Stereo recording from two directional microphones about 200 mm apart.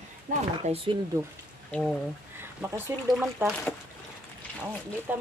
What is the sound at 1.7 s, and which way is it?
Speech, centre (ahead or behind).